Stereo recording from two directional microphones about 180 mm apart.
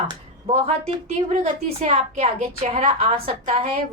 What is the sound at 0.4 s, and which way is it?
A woman's voice, 30° right (ahead or behind).